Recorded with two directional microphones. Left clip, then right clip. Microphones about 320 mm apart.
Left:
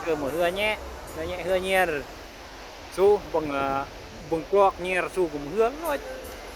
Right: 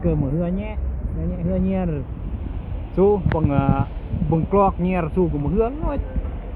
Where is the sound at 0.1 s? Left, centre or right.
Centre.